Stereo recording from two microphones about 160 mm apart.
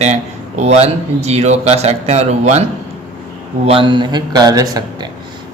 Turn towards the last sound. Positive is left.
turn(degrees=-25)  # may be behind; listen again after turning